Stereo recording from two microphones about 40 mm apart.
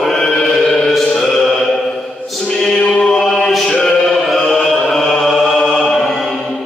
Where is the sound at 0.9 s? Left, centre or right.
Centre.